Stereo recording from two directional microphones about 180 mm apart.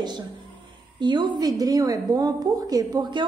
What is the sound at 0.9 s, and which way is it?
A woman's voice, 25° right (ahead or behind).